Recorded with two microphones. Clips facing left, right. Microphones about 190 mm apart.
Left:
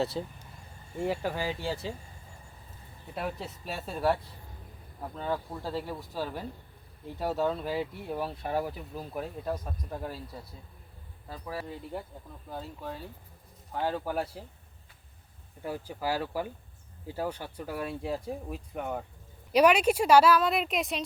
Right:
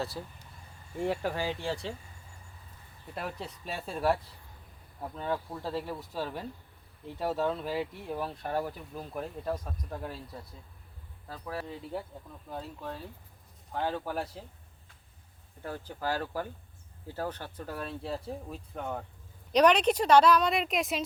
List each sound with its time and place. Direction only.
0.1 s speech: 20° left (ahead or behind)
0.9 s speech: centre (ahead or behind)
3.2 s speech: centre (ahead or behind)
15.6 s speech: 10° left (ahead or behind)